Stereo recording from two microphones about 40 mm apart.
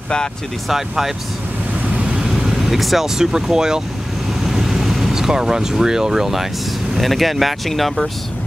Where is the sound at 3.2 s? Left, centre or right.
Centre.